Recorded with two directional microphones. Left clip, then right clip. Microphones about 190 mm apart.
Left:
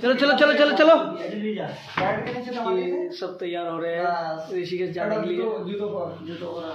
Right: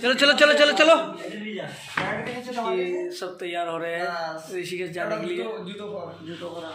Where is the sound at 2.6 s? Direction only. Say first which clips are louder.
Left 2 dB; 10° right (ahead or behind).